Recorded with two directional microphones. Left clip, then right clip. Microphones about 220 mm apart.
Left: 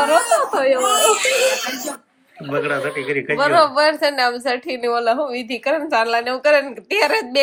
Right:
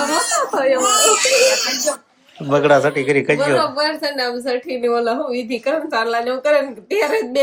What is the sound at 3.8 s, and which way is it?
A woman's voice, centre (ahead or behind).